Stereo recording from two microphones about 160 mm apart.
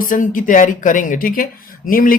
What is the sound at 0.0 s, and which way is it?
Speech, 55° left (ahead or behind).